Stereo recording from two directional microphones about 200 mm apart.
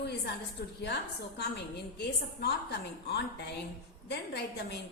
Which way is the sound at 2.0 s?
55° left (ahead or behind).